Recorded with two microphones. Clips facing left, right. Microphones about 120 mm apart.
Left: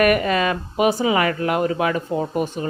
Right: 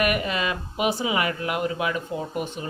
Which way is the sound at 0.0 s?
45° left (ahead or behind).